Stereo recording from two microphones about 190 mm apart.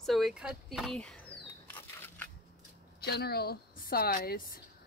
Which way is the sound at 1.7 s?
10° left (ahead or behind).